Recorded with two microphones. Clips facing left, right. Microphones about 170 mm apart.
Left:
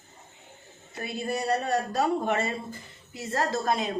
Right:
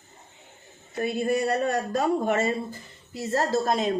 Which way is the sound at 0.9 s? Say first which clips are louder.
Right 6 dB; 50° right (ahead or behind).